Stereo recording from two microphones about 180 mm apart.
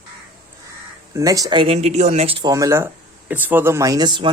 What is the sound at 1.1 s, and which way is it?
Speech, 20° right (ahead or behind).